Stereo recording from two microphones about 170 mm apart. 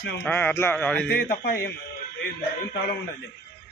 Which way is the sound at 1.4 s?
65° left (ahead or behind).